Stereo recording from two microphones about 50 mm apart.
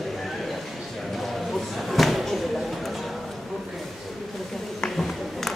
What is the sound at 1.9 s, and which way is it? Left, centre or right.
Slam, centre.